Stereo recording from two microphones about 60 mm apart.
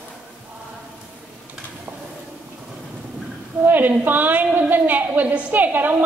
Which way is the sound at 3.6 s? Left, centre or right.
Right.